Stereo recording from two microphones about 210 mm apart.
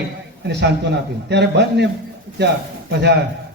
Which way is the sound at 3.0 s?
55° right (ahead or behind).